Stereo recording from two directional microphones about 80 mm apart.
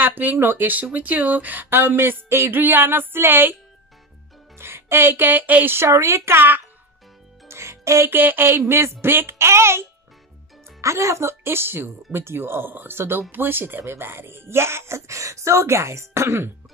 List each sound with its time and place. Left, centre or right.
0.0 s speech: right
4.6 s speech: right
7.4 s music: right
8.1 s speech: right